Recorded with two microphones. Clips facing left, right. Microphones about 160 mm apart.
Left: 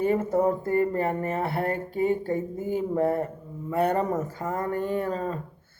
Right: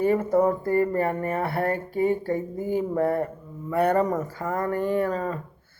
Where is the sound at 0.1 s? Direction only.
25° left (ahead or behind).